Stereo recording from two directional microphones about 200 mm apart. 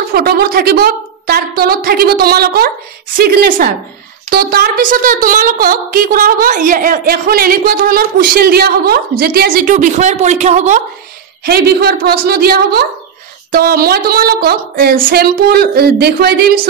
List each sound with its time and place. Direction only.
0.1 s a woman's voice: 50° right (ahead or behind); by 10.8 s 35° right (ahead or behind)
11.4 s a woman's voice: 50° right (ahead or behind)